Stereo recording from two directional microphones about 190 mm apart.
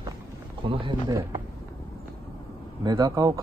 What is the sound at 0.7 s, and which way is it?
Speech, 25° right (ahead or behind).